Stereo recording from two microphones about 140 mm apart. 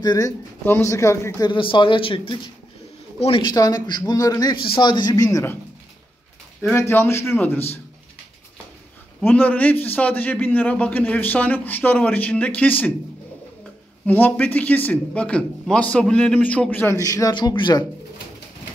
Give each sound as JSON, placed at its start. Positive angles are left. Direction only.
{"t": 0.0, "sound": "speech", "side_deg": 30}
{"t": 1.5, "sound": "speech", "side_deg": 35}
{"t": 6.7, "sound": "a man's voice", "side_deg": 15}
{"t": 9.2, "sound": "a man's voice", "side_deg": 10}
{"t": 14.0, "sound": "a man's voice", "side_deg": 15}